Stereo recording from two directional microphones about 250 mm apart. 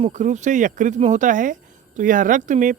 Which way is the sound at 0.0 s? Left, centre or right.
Right.